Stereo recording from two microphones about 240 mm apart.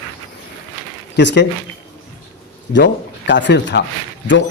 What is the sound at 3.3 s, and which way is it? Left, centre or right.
Speech, left.